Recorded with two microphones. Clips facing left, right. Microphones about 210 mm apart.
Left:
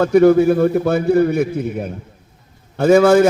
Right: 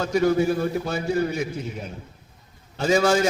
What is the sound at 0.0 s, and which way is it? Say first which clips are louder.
A man's voice: left 9 dB; 55° left (ahead or behind).